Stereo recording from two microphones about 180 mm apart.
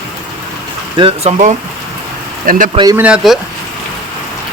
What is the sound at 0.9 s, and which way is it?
Speech, 30° right (ahead or behind).